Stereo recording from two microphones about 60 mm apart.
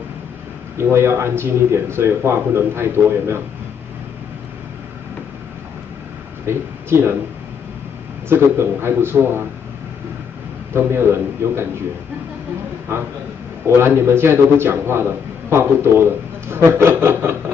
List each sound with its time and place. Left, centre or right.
0.7 s a man's voice: right
6.4 s speech: right
8.3 s a man's voice: right
10.7 s a man's voice: right
12.9 s a man's voice: right